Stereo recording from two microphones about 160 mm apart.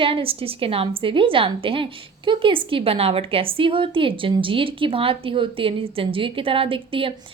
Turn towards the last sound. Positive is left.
turn(degrees=-35)  # may be behind; listen again after turning